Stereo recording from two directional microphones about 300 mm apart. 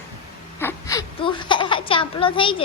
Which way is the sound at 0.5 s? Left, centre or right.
Centre.